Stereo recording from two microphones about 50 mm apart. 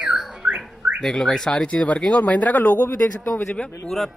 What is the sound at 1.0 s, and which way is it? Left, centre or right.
Speech, centre.